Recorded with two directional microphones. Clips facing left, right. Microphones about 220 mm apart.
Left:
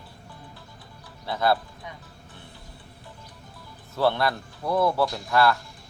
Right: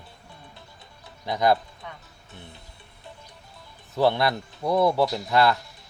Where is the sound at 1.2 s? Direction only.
15° right (ahead or behind).